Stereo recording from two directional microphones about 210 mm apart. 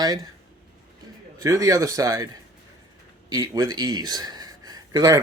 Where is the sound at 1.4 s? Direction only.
15° right (ahead or behind).